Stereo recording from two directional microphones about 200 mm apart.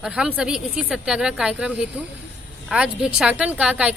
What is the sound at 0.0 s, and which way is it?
A woman's voice, 5° right (ahead or behind).